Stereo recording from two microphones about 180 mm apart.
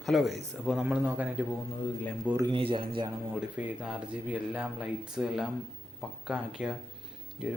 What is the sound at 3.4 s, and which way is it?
Speech, 5° right (ahead or behind).